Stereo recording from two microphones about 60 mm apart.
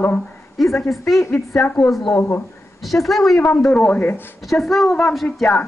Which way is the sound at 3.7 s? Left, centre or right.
Left.